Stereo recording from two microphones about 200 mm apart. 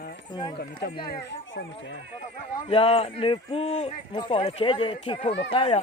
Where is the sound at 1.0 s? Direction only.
50° left (ahead or behind).